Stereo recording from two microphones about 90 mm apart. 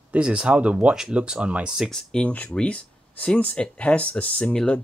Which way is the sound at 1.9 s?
5° left (ahead or behind).